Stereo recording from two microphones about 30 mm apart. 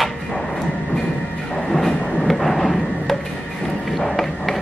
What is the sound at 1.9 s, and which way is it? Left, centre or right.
Train, left.